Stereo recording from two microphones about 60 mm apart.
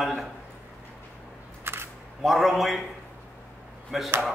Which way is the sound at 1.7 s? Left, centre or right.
Right.